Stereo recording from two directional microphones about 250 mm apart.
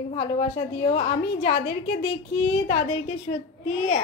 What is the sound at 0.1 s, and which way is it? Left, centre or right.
A woman's voice, left.